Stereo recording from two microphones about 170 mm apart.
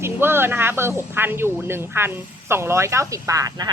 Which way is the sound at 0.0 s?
15° right (ahead or behind).